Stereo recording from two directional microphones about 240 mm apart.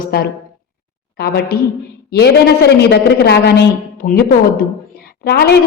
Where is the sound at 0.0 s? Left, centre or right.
Left.